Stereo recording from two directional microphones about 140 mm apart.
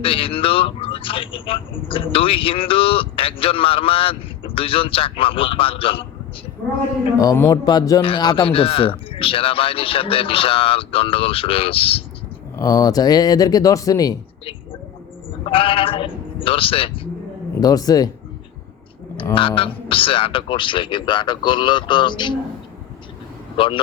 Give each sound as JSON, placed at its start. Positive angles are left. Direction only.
{"t": 0.0, "sound": "a man's voice", "side_deg": 40}
{"t": 7.2, "sound": "a man's voice", "side_deg": 25}
{"t": 12.5, "sound": "speech", "side_deg": 25}
{"t": 15.4, "sound": "a man's voice", "side_deg": 40}
{"t": 17.6, "sound": "speech", "side_deg": 25}
{"t": 19.3, "sound": "a man's voice", "side_deg": 40}
{"t": 23.6, "sound": "a man's voice", "side_deg": 40}